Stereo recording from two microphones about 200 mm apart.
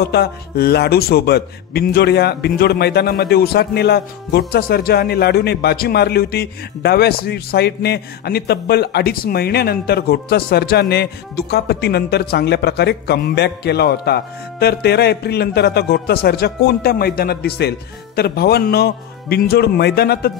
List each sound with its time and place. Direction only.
0.0 s a man's voice: 55° left (ahead or behind)